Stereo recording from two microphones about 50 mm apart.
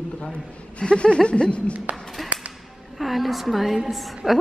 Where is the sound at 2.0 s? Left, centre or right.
Centre.